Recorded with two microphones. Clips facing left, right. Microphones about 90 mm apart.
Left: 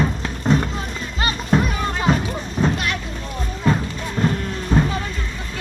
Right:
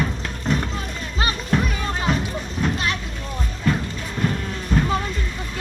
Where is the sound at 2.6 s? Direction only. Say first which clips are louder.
Left 4 dB; 25° left (ahead or behind).